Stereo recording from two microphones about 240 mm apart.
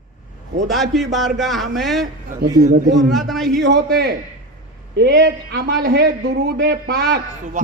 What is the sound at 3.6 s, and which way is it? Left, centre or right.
A man's voice, right.